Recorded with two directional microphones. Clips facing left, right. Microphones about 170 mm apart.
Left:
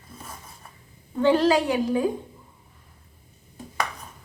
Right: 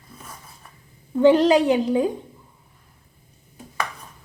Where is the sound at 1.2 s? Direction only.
20° right (ahead or behind).